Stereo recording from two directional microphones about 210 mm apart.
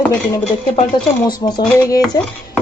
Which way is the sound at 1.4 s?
20° left (ahead or behind).